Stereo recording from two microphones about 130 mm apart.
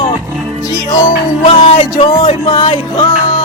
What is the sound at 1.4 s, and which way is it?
Music, 50° left (ahead or behind).